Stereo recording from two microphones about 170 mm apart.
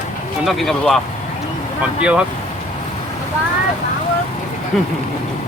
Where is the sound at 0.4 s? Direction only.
Centre (ahead or behind).